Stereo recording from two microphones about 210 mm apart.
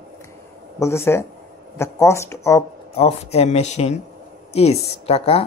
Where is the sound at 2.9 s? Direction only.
30° left (ahead or behind).